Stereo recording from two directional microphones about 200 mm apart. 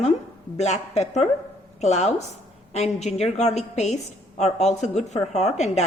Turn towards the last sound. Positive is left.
turn(degrees=35)  # may be behind; listen again after turning